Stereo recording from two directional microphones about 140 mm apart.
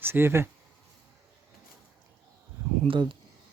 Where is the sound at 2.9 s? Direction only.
40° right (ahead or behind).